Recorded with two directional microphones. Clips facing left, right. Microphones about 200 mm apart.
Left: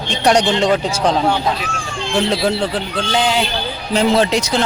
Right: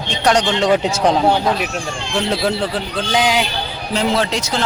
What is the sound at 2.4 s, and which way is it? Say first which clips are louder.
Speech: left 1 dB; centre (ahead or behind).